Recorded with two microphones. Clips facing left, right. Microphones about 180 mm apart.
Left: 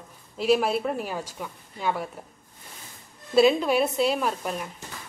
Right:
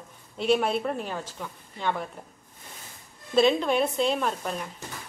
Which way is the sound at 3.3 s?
5° left (ahead or behind).